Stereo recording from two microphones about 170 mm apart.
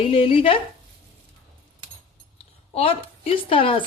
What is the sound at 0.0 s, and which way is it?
Speech, 30° left (ahead or behind).